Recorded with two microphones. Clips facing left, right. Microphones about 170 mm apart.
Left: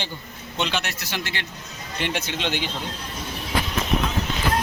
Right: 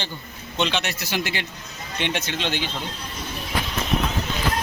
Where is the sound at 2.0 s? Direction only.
5° left (ahead or behind).